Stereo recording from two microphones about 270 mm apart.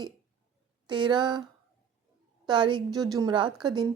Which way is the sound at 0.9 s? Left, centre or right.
Centre.